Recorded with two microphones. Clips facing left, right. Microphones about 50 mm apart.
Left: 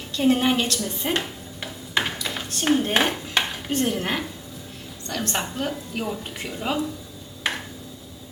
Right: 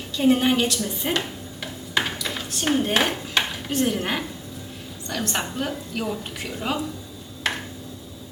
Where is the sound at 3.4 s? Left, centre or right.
Centre.